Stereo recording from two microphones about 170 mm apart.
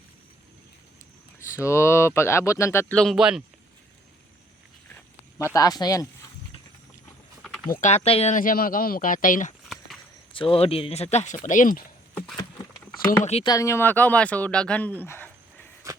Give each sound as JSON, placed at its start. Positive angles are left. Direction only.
{"t": 1.5, "sound": "speech", "side_deg": 15}
{"t": 2.9, "sound": "speech", "side_deg": 0}
{"t": 5.5, "sound": "speech", "side_deg": 20}
{"t": 7.4, "sound": "a sound", "side_deg": 0}
{"t": 7.7, "sound": "speech", "side_deg": 45}
{"t": 10.3, "sound": "speech", "side_deg": 30}
{"t": 12.1, "sound": "a sound", "side_deg": 5}
{"t": 13.2, "sound": "speech", "side_deg": 35}
{"t": 13.5, "sound": "speech", "side_deg": 15}
{"t": 15.9, "sound": "a sound", "side_deg": -15}